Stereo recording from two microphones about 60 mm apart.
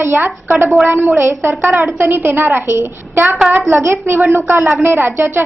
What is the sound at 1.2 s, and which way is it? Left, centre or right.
Speech, right.